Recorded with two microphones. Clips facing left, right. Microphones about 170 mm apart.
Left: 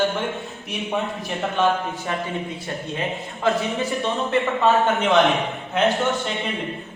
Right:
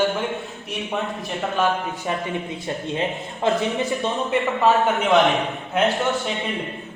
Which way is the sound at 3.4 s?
20° right (ahead or behind).